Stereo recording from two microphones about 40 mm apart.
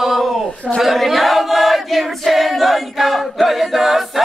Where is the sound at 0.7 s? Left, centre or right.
Centre.